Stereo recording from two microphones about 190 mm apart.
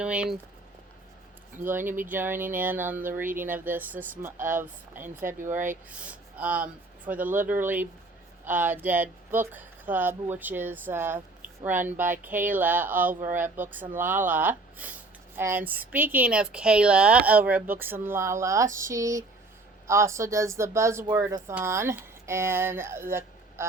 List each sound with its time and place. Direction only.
0.0 s speech: 5° right (ahead or behind)
1.6 s speech: 10° right (ahead or behind)